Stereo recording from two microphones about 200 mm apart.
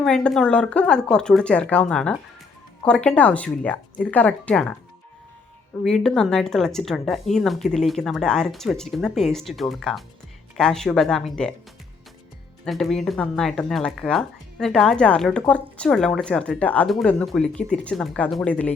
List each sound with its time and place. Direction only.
0.0 s speech: 5° left (ahead or behind)
5.8 s speech: centre (ahead or behind)
12.6 s speech: centre (ahead or behind)